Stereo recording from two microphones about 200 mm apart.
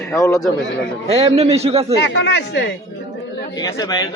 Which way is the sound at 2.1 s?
65° left (ahead or behind).